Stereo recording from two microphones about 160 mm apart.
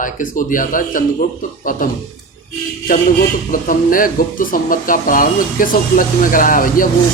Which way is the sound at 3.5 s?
60° left (ahead or behind).